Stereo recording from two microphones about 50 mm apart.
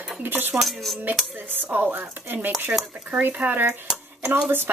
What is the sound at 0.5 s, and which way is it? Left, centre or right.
Dishes, centre.